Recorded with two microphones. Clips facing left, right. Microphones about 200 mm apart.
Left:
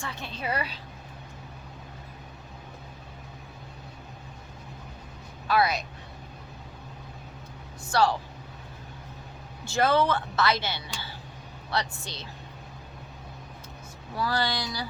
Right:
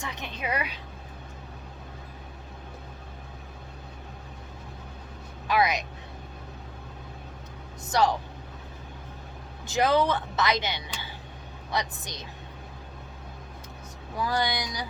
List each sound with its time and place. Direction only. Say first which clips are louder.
0.0 s a woman's voice: even; 15° right (ahead or behind)
5.5 s a woman's voice: even; 15° right (ahead or behind)
7.9 s speech: even; 20° right (ahead or behind)
9.6 s a woman's voice: even; 15° right (ahead or behind)
14.2 s a woman's voice: even; 15° right (ahead or behind)